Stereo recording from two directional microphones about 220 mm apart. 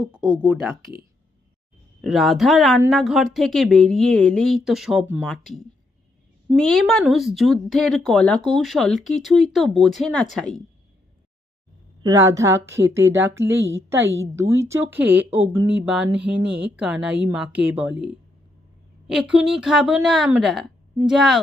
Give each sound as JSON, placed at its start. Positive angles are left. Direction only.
{"t": 0.4, "sound": "speech", "side_deg": 0}
{"t": 2.0, "sound": "speech", "side_deg": 0}
{"t": 6.5, "sound": "speech", "side_deg": 0}
{"t": 12.0, "sound": "a woman's voice", "side_deg": -15}
{"t": 17.9, "sound": "speech", "side_deg": 20}
{"t": 19.0, "sound": "speech", "side_deg": 0}